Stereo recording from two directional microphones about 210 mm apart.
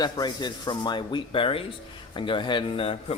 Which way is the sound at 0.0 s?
20° left (ahead or behind).